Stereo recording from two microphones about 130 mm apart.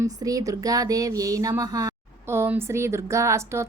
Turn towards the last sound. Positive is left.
turn(degrees=-20)  # may be behind; listen again after turning